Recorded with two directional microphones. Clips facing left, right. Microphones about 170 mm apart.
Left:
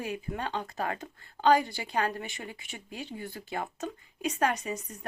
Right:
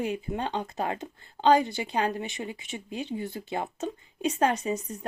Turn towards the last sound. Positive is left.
turn(degrees=-25)  # may be behind; listen again after turning